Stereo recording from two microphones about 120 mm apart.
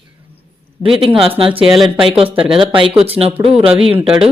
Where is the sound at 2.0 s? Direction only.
50° right (ahead or behind).